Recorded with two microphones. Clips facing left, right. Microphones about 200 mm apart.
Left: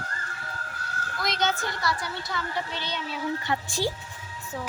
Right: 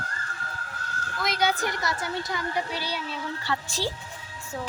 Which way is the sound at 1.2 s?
10° right (ahead or behind).